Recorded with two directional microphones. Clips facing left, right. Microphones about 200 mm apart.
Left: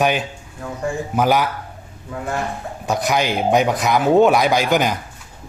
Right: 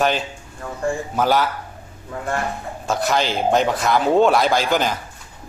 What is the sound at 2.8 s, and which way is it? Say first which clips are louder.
Speech: left 1 dB; 15° left (ahead or behind).